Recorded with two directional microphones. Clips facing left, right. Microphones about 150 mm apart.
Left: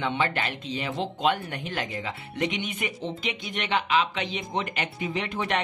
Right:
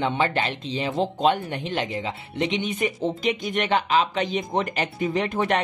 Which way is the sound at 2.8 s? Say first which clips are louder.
Right 7 dB; 40° right (ahead or behind).